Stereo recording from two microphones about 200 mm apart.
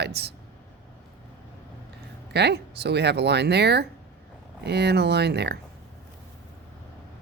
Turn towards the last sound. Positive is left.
turn(degrees=-55)  # may be behind; listen again after turning